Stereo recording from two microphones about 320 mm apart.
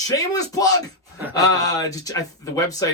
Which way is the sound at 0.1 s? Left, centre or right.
Centre.